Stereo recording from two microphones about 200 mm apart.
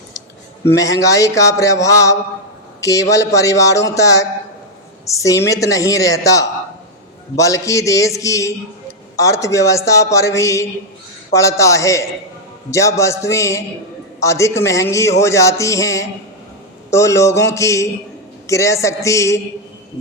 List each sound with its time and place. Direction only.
0.7 s speech: 15° left (ahead or behind)